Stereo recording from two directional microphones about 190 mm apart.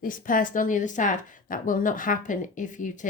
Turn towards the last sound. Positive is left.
turn(degrees=40)  # may be behind; listen again after turning